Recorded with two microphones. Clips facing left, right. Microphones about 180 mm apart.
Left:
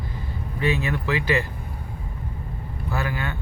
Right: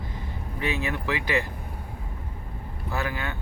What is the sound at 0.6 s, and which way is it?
Speech, 15° right (ahead or behind).